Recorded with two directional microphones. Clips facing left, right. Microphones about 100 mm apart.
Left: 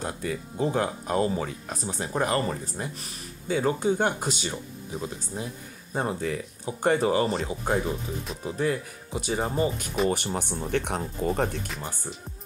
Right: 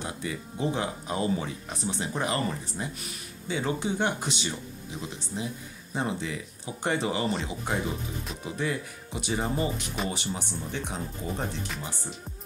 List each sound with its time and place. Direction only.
0.0 s speech: 45° left (ahead or behind)
10.0 s speech: 55° left (ahead or behind)